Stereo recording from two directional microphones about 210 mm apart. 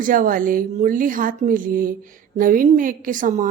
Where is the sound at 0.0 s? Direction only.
40° right (ahead or behind).